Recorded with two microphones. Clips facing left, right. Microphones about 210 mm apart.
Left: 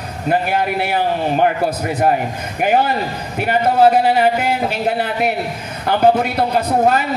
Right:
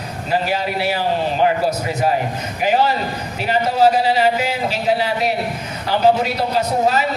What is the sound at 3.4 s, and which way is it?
A man's voice, 55° left (ahead or behind).